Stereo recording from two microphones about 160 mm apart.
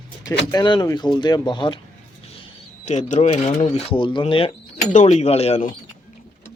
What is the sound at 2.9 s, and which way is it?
Speech, 50° left (ahead or behind).